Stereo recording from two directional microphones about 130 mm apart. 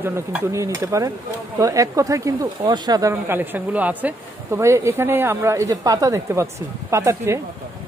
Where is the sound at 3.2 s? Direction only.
15° right (ahead or behind).